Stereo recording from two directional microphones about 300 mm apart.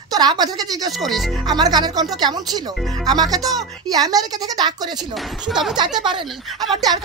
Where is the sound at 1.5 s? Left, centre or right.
Centre.